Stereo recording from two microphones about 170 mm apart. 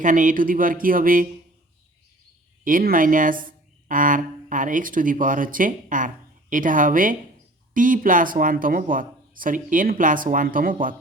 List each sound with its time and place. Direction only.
0.0 s speech: 50° right (ahead or behind)
2.6 s speech: 55° right (ahead or behind)